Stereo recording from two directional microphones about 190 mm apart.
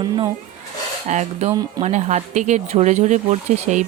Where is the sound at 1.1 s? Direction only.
40° right (ahead or behind).